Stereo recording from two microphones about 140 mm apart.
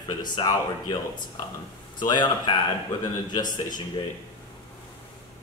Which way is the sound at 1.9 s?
30° left (ahead or behind).